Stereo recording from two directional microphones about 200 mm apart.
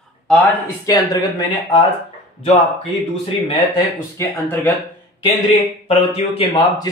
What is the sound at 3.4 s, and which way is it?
Speech, 20° left (ahead or behind).